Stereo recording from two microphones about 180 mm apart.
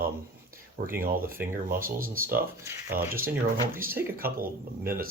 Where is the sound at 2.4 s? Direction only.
15° right (ahead or behind).